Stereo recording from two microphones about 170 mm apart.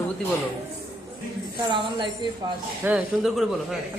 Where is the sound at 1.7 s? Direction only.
30° right (ahead or behind).